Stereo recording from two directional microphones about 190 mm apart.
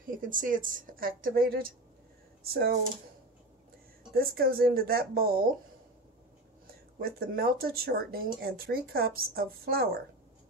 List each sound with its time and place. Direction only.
0.0 s speech: 45° right (ahead or behind)
4.1 s speech: 50° right (ahead or behind)
7.0 s speech: 55° right (ahead or behind)